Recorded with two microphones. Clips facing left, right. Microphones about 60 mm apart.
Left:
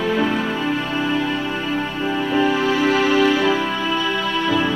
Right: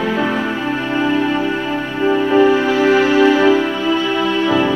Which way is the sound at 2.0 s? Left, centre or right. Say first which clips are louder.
Right 8 dB; right.